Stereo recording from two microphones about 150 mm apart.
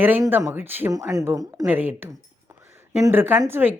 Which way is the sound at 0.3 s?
15° right (ahead or behind).